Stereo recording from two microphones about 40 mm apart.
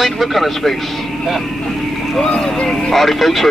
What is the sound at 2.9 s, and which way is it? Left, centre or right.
Speech, centre.